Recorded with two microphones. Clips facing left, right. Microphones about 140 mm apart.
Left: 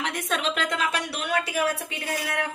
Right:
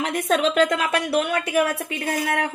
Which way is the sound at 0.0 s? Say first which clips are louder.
Right 7 dB; 45° right (ahead or behind).